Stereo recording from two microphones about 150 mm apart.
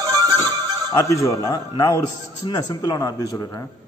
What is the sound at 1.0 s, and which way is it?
A man's voice, 20° left (ahead or behind).